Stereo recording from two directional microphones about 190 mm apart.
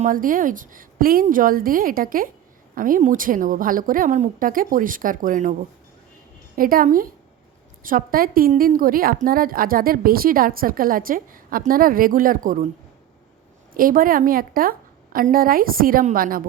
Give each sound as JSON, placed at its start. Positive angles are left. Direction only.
{"t": 0.0, "sound": "a woman's voice", "side_deg": -45}
{"t": 6.6, "sound": "a woman's voice", "side_deg": -50}
{"t": 13.7, "sound": "a woman's voice", "side_deg": -50}